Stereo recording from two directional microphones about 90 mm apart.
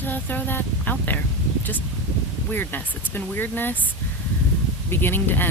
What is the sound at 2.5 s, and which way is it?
Speech, 20° left (ahead or behind).